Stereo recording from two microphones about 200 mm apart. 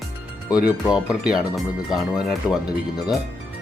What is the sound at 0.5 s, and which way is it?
Speech, 5° right (ahead or behind).